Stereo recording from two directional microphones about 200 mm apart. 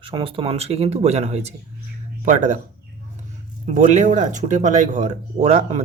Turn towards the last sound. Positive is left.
turn(degrees=-35)  # may be behind; listen again after turning